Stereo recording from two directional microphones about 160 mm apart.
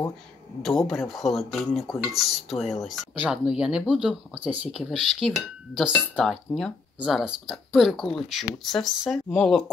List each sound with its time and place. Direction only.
0.6 s speech: centre (ahead or behind)